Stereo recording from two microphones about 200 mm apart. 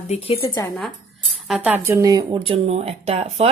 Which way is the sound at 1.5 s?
5° right (ahead or behind).